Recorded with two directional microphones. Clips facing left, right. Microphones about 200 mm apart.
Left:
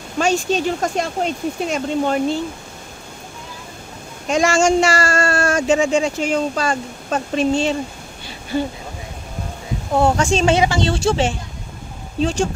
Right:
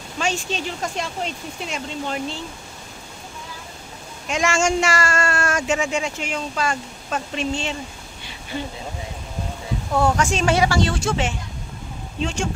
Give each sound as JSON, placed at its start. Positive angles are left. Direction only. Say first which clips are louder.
{"t": 0.2, "sound": "speech", "louder": "left 8 dB", "side_deg": 40}
{"t": 4.3, "sound": "speech", "louder": "left 5 dB", "side_deg": 35}
{"t": 9.9, "sound": "speech", "louder": "left 4 dB", "side_deg": 25}